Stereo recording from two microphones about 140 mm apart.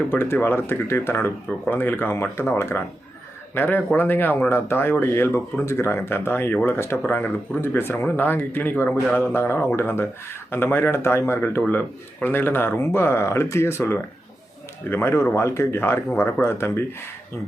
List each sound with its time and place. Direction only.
0.1 s speech: 15° left (ahead or behind)